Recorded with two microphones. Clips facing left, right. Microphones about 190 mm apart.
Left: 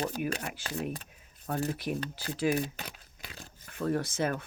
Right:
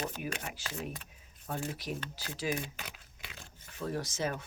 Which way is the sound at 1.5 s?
35° left (ahead or behind).